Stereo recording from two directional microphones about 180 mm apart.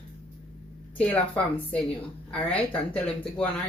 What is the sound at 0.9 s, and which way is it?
Speech, 5° left (ahead or behind).